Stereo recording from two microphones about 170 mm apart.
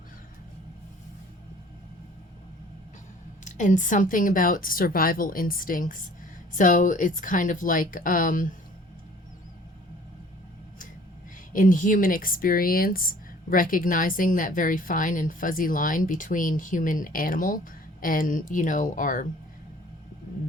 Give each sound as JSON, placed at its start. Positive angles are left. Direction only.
{"t": 3.4, "sound": "speech", "side_deg": 45}
{"t": 11.5, "sound": "speech", "side_deg": 55}